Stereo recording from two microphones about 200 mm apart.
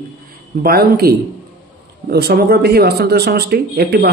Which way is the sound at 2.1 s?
50° right (ahead or behind).